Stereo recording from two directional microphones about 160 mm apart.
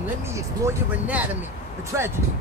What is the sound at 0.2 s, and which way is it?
Speech, 10° right (ahead or behind).